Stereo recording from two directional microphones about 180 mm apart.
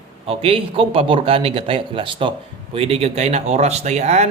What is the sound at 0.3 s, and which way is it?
Speech, 30° right (ahead or behind).